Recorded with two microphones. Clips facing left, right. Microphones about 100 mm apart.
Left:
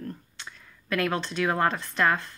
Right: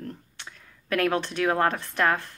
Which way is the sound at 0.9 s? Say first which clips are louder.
Right 3 dB; 55° right (ahead or behind).